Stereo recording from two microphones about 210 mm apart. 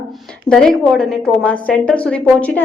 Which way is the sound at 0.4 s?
5° left (ahead or behind).